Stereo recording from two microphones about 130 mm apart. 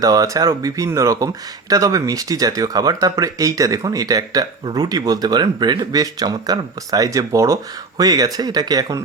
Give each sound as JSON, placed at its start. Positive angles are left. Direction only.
{"t": 0.0, "sound": "speech", "side_deg": -30}